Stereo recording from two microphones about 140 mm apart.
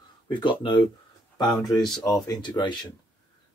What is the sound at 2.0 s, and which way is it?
Speech, 25° left (ahead or behind).